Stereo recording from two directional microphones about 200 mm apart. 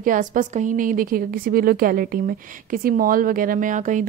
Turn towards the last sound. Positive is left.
turn(degrees=-40)  # may be behind; listen again after turning